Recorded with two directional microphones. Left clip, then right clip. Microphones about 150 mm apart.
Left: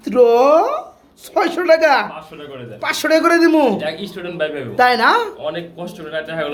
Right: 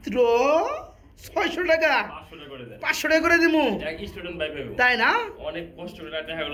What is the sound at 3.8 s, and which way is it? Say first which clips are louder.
Speech: left 8 dB; 70° left (ahead or behind).